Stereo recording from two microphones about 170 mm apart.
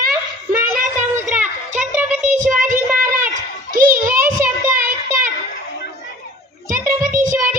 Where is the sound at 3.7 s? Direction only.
55° right (ahead or behind).